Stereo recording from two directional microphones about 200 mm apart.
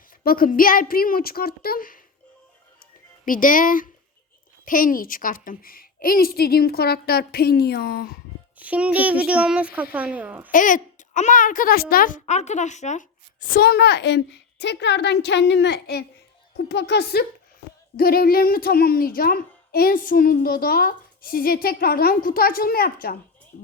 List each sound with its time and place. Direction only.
0.3 s a child's voice: 45° left (ahead or behind)
3.2 s a child's voice: 40° left (ahead or behind)
8.5 s child singing: 5° right (ahead or behind)
10.5 s a child's voice: 40° left (ahead or behind)